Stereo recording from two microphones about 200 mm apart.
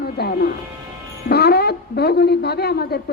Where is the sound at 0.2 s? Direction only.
50° left (ahead or behind).